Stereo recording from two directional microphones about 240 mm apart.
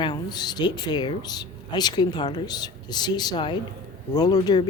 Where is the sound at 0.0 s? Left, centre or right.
Centre.